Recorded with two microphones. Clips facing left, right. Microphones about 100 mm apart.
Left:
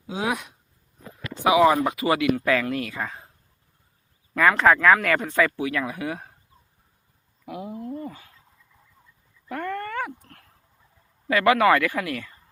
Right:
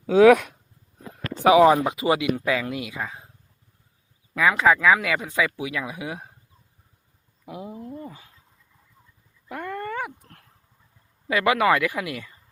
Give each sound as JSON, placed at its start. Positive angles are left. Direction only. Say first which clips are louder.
{"t": 0.1, "sound": "speech", "louder": "right 14 dB", "side_deg": -65}
{"t": 1.5, "sound": "speech", "louder": "right 3 dB", "side_deg": -30}
{"t": 1.8, "sound": "speech", "louder": "even", "side_deg": -20}
{"t": 4.4, "sound": "speech", "louder": "left 1 dB", "side_deg": -5}
{"t": 7.4, "sound": "speech", "louder": "left 2 dB", "side_deg": -20}
{"t": 7.9, "sound": "a sound", "louder": "left 3 dB", "side_deg": -15}
{"t": 9.5, "sound": "a sound", "louder": "left 1 dB", "side_deg": -10}
{"t": 11.3, "sound": "speech", "louder": "left 2 dB", "side_deg": -15}